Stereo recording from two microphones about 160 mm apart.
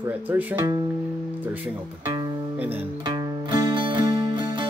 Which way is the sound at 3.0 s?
25° right (ahead or behind).